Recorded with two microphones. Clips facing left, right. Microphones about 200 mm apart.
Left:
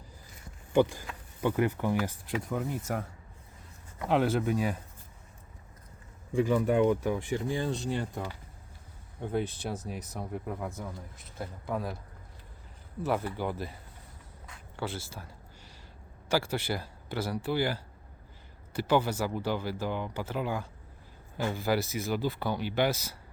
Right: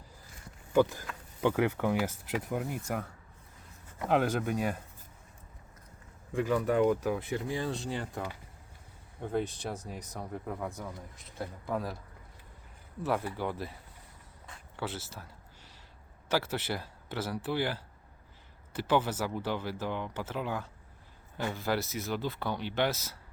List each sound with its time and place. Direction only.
0.8 s speech: 15° left (ahead or behind)
1.8 s speech: 15° right (ahead or behind)
4.1 s speech: centre (ahead or behind)
6.3 s speech: centre (ahead or behind)
13.0 s speech: centre (ahead or behind)
14.8 s speech: 5° right (ahead or behind)
16.3 s speech: 5° right (ahead or behind)